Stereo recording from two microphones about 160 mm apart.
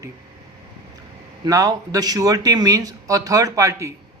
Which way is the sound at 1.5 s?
20° right (ahead or behind).